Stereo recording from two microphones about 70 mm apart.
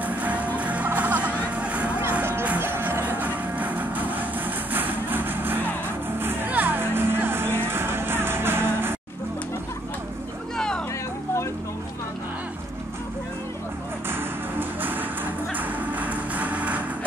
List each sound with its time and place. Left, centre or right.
0.0 s music: right
2.6 s music: right
14.6 s music: right